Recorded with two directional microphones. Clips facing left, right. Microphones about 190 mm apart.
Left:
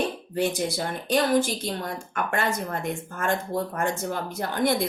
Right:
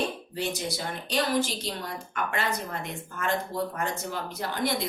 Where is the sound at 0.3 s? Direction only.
50° left (ahead or behind).